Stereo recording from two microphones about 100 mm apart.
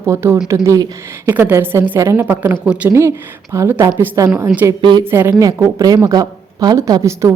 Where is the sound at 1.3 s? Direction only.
20° right (ahead or behind).